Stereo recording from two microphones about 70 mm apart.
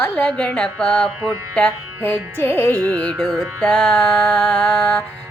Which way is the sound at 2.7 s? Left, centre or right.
Right.